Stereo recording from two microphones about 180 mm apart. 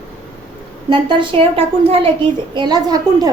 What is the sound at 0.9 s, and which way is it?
A woman's voice, 25° right (ahead or behind).